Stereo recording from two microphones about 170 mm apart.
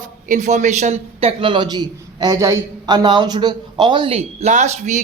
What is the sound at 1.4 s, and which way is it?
A man's voice, 30° right (ahead or behind).